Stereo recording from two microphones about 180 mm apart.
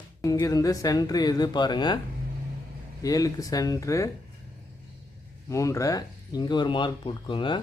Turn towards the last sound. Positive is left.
turn(degrees=25)  # may be behind; listen again after turning